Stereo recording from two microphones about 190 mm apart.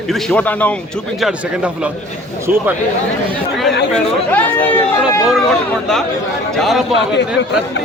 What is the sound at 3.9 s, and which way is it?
A man's voice, 10° left (ahead or behind).